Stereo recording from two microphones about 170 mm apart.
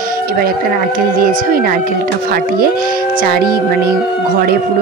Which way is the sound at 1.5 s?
60° right (ahead or behind).